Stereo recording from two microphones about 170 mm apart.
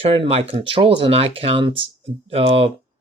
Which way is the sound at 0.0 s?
35° right (ahead or behind).